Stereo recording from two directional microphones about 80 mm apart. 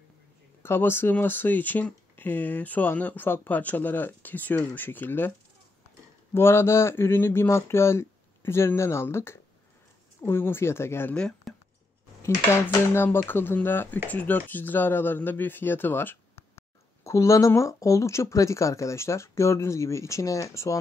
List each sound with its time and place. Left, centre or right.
0.6 s speech: left
6.3 s speech: left
11.1 s speech: centre
12.2 s speech: left
17.0 s speech: left